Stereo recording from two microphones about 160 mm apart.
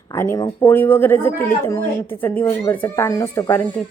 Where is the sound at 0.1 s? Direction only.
20° left (ahead or behind).